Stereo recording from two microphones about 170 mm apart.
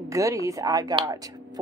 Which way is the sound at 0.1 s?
20° right (ahead or behind).